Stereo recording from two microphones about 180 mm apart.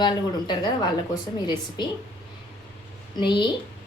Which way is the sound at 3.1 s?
25° left (ahead or behind).